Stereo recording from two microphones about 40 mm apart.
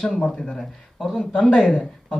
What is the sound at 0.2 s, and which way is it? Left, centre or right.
Speech, left.